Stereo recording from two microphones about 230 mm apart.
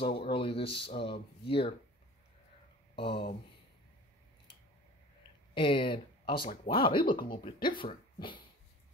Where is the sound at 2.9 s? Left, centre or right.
Left.